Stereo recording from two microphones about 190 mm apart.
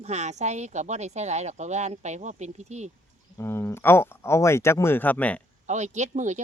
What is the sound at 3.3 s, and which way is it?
Speech, 15° left (ahead or behind).